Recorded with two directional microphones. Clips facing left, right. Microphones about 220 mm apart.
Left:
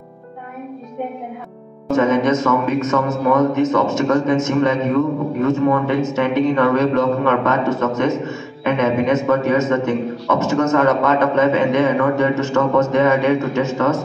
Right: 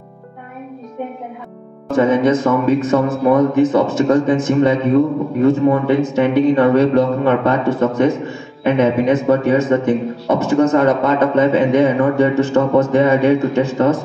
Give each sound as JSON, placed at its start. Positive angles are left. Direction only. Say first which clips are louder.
{"t": 1.9, "sound": "a man's voice", "louder": "right 2 dB", "side_deg": -30}